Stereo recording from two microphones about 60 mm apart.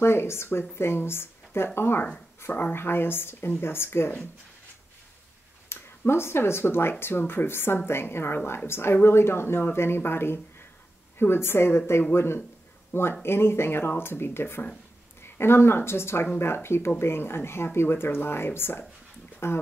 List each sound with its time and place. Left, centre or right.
0.0 s speech: left
5.7 s speech: left